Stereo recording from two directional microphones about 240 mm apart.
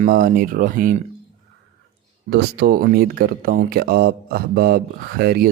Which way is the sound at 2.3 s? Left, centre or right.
Right.